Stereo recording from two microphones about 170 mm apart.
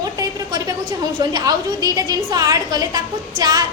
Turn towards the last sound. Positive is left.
turn(degrees=-25)  # may be behind; listen again after turning